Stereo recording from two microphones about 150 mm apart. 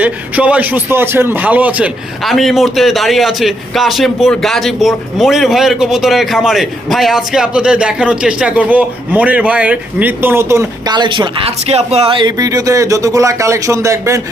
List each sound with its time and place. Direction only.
0.0 s a man's voice: 10° right (ahead or behind)